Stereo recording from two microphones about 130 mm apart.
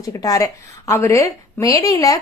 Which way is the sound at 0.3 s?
25° left (ahead or behind).